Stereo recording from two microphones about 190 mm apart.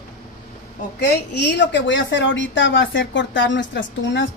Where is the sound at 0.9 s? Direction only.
60° left (ahead or behind).